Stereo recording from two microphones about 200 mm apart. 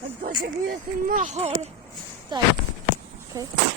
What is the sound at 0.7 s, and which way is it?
Speech, 45° right (ahead or behind).